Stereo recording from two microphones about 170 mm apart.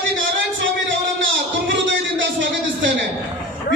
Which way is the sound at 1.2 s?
90° right.